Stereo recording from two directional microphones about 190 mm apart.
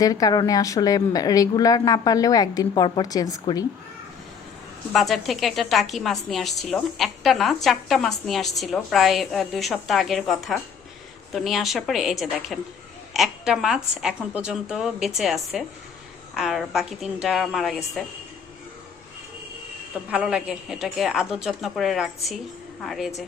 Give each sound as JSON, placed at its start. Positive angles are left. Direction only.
{"t": 0.0, "sound": "speech", "side_deg": 20}
{"t": 4.9, "sound": "a woman's voice", "side_deg": 0}
{"t": 20.1, "sound": "a woman's voice", "side_deg": -5}